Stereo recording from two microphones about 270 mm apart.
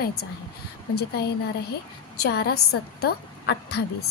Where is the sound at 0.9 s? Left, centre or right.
Left.